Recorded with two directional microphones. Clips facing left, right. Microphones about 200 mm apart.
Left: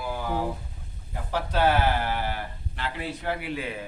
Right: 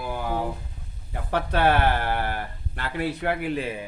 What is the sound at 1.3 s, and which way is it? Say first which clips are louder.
Speech: right 2 dB; 60° right (ahead or behind).